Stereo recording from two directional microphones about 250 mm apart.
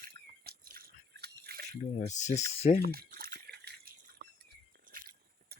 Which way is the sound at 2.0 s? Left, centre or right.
Left.